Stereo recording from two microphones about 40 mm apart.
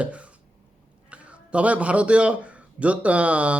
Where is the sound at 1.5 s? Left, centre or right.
Right.